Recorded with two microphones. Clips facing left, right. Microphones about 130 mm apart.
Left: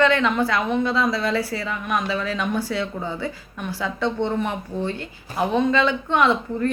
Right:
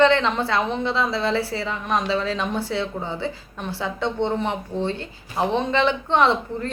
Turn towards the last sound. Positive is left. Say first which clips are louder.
# even
turn(degrees=-25)  # may be behind; listen again after turning